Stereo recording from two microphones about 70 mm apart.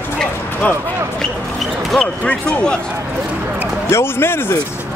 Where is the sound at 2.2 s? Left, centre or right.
Centre.